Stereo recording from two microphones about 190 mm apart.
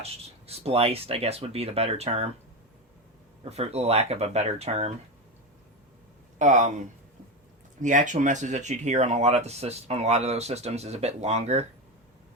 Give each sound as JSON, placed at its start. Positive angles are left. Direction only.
{"t": 0.0, "sound": "speech", "side_deg": -30}
{"t": 3.5, "sound": "speech", "side_deg": -35}
{"t": 6.4, "sound": "speech", "side_deg": -40}